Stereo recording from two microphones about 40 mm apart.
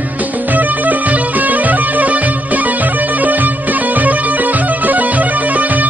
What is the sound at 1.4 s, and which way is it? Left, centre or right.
Music, right.